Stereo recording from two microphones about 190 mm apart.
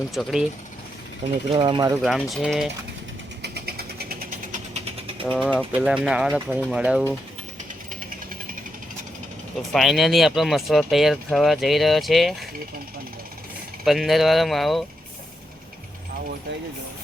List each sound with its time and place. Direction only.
0.1 s speech: centre (ahead or behind)
1.5 s speech: 25° right (ahead or behind)
2.0 s speech: centre (ahead or behind)
3.4 s vehicle: 55° right (ahead or behind); by 5.2 s 30° right (ahead or behind)
5.3 s speech: 5° left (ahead or behind)
9.7 s speech: centre (ahead or behind)
13.8 s speech: centre (ahead or behind)